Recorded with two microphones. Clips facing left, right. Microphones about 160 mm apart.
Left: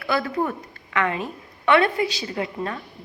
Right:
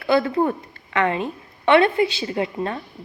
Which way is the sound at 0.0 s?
25° right (ahead or behind).